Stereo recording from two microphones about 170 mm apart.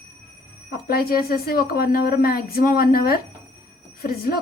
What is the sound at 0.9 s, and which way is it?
A woman's voice, 60° left (ahead or behind).